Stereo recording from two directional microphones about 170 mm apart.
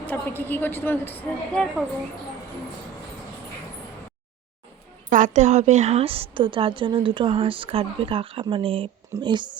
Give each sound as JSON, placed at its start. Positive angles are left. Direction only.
{"t": 0.0, "sound": "a woman's voice", "side_deg": 10}
{"t": 5.1, "sound": "a woman's voice", "side_deg": -45}